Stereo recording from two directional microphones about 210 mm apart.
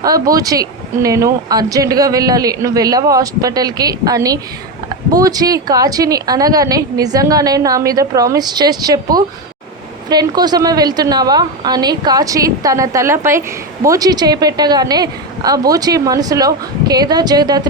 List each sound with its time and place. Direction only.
0.0 s a woman's voice: 15° right (ahead or behind)